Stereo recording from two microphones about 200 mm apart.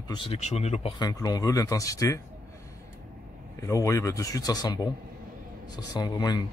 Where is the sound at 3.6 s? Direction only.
15° left (ahead or behind).